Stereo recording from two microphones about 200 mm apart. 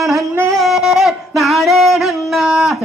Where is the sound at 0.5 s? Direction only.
Centre (ahead or behind).